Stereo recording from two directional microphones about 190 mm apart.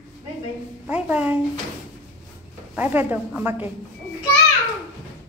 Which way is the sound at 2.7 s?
10° right (ahead or behind).